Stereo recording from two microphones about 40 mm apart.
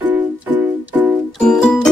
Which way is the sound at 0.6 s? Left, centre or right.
Right.